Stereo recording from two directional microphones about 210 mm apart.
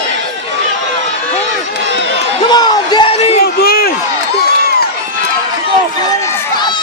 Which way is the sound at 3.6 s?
45° left (ahead or behind).